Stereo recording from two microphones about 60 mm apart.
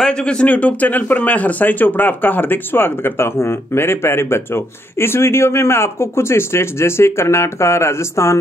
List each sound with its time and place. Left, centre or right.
0.0 s speech: centre; by 8.4 s left